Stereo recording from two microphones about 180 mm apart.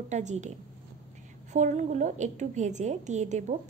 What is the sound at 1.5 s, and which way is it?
A woman's voice, 40° right (ahead or behind).